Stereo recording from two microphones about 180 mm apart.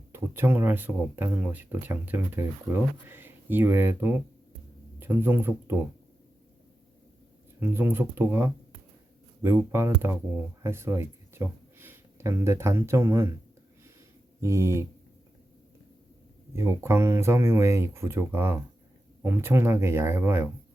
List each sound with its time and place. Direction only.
0.1 s speech: 10° right (ahead or behind)
7.6 s speech: 15° right (ahead or behind)
14.4 s speech: 15° right (ahead or behind)
16.6 s speech: 15° right (ahead or behind)